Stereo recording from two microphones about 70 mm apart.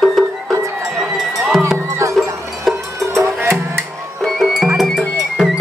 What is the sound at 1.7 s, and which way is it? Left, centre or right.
Music, right.